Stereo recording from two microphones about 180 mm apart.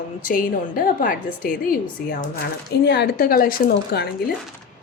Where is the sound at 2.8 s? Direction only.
65° left (ahead or behind).